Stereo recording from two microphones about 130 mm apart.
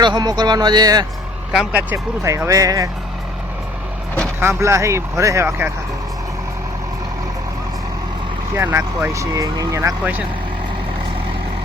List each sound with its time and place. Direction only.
0.0 s speech: 35° right (ahead or behind)
1.5 s speech: 10° right (ahead or behind)
2.2 s speech: 25° right (ahead or behind)
4.4 s speech: 20° right (ahead or behind)
8.5 s speech: 20° right (ahead or behind)